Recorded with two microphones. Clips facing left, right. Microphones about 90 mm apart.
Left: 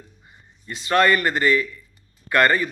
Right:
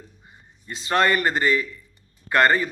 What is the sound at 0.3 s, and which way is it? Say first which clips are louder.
A man's voice: left 2 dB; 25° right (ahead or behind).